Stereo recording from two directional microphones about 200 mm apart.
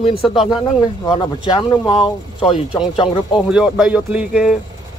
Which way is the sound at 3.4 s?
5° right (ahead or behind).